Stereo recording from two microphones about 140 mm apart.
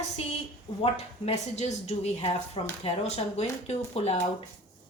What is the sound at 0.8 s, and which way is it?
A woman's voice, 50° left (ahead or behind).